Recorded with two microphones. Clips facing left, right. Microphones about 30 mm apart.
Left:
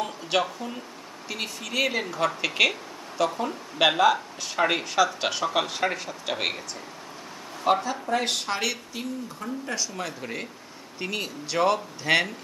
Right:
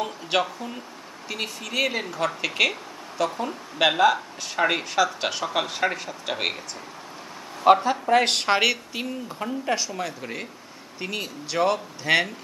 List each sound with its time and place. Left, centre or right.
0.0 s speech: centre
7.7 s speech: right
8.2 s speech: right
8.6 s speech: right
9.9 s speech: centre